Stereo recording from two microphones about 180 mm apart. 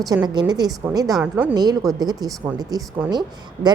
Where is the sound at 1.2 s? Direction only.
10° right (ahead or behind).